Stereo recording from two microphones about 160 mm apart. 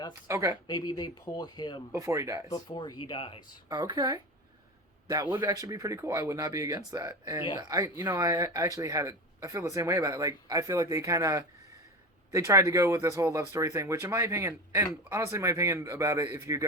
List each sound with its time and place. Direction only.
0.3 s speech: 20° right (ahead or behind)
0.7 s speech: 25° left (ahead or behind)
1.9 s speech: 20° right (ahead or behind)
2.5 s speech: 25° left (ahead or behind)
3.7 s a man's voice: 25° right (ahead or behind)